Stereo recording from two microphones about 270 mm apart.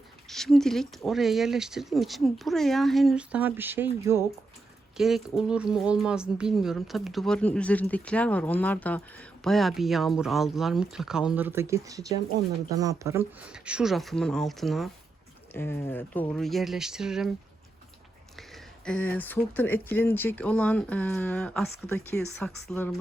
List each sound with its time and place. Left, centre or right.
0.3 s speech: centre
18.3 s speech: centre